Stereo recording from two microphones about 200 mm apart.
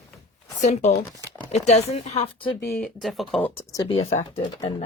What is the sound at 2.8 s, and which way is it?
Speech, centre (ahead or behind).